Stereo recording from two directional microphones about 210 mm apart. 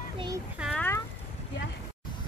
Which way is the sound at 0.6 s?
5° left (ahead or behind).